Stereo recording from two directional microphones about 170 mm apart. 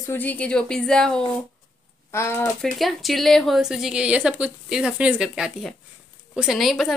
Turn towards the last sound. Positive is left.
turn(degrees=0)  # may be behind; listen again after turning